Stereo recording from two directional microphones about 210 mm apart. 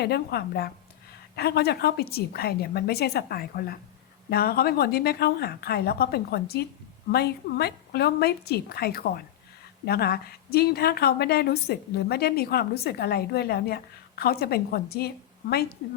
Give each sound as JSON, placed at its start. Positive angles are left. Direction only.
{"t": 0.0, "sound": "a woman's voice", "side_deg": 50}